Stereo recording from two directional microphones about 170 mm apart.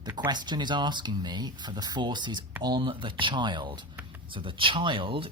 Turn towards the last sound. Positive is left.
turn(degrees=-30)  # may be behind; listen again after turning